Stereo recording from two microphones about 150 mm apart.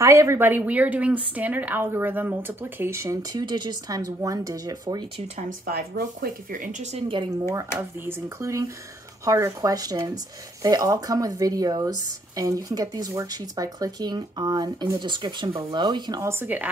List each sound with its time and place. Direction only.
0.0 s a woman's voice: 20° right (ahead or behind)
5.7 s speech: 85° right; by 7.2 s 40° right (ahead or behind)
7.5 s speech: 15° right (ahead or behind)